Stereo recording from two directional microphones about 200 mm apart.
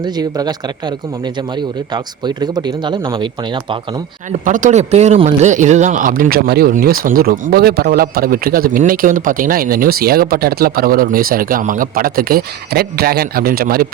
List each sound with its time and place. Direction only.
0.0 s speech: 20° right (ahead or behind)
4.3 s speech: 40° right (ahead or behind)